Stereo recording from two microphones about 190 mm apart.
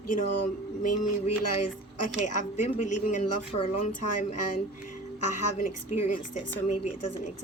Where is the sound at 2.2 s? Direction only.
40° left (ahead or behind).